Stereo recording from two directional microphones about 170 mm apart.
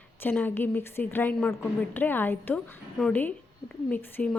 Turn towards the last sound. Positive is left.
turn(degrees=10)  # may be behind; listen again after turning